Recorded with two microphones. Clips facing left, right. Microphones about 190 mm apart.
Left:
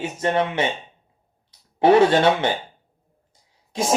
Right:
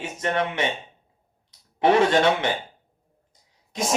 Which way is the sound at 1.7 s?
30° left (ahead or behind).